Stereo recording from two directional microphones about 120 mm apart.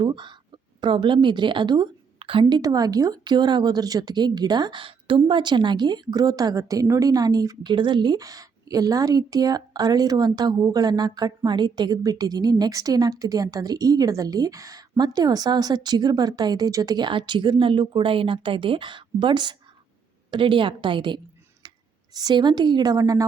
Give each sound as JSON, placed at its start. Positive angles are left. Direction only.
{"t": 0.0, "sound": "a woman's voice", "side_deg": -40}
{"t": 21.6, "sound": "clicking", "side_deg": -35}
{"t": 22.1, "sound": "speech", "side_deg": -35}